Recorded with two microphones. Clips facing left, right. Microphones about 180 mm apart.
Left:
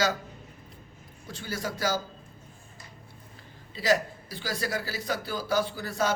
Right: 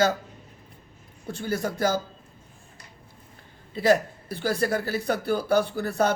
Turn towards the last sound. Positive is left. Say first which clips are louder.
# right 5 dB
turn(degrees=-60)  # may be behind; listen again after turning